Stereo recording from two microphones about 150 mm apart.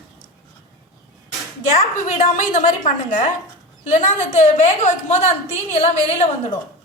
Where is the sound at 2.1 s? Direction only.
55° left (ahead or behind).